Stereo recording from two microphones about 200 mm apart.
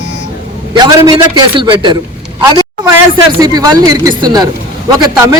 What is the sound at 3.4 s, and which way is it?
A man's voice, 20° right (ahead or behind).